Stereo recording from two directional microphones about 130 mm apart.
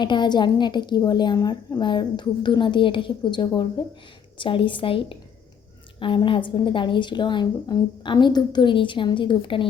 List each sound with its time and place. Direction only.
0.0 s a woman's voice: 35° left (ahead or behind)